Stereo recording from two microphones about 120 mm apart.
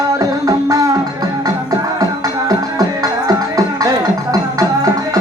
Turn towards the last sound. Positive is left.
turn(degrees=-30)  # may be behind; listen again after turning